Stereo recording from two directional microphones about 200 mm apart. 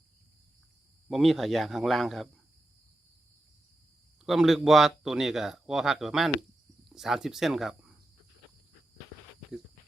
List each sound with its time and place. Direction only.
1.1 s speech: centre (ahead or behind)
4.3 s speech: centre (ahead or behind)